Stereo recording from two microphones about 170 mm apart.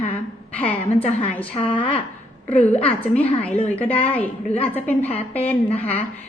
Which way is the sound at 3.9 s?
35° left (ahead or behind).